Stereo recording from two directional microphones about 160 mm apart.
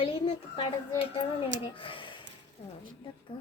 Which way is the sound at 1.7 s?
35° left (ahead or behind).